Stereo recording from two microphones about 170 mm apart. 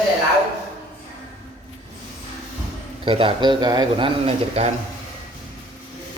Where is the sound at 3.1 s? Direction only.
30° right (ahead or behind).